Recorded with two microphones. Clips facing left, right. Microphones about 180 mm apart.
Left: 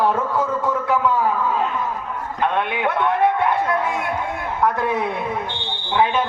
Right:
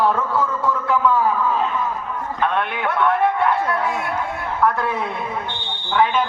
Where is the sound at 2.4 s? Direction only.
15° left (ahead or behind).